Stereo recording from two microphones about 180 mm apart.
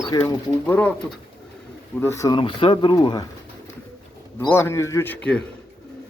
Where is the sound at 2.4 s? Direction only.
30° left (ahead or behind).